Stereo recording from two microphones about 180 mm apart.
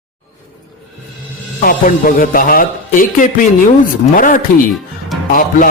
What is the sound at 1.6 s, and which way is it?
Speech, 50° left (ahead or behind).